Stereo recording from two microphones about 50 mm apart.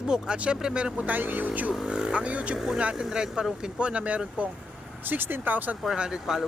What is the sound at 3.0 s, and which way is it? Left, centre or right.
Speech, centre.